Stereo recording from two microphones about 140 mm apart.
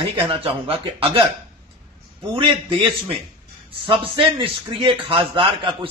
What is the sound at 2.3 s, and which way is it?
A man's voice, 40° right (ahead or behind).